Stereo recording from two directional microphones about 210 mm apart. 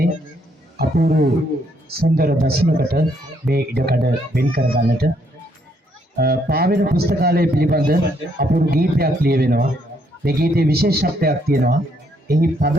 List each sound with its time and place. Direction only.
0.8 s a man's voice: 45° right (ahead or behind)
6.1 s a man's voice: 45° right (ahead or behind)